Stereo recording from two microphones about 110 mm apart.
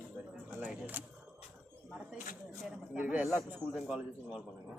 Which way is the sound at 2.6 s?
10° right (ahead or behind).